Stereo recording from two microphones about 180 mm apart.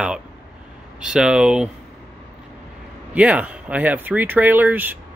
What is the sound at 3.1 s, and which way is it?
Speech, 10° right (ahead or behind).